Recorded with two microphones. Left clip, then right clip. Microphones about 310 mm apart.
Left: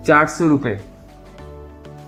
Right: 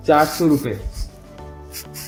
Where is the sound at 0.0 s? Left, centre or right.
Left.